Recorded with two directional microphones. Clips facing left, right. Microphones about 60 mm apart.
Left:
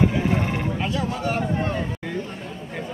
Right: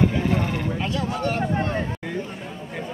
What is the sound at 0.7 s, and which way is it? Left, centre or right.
Speech, centre.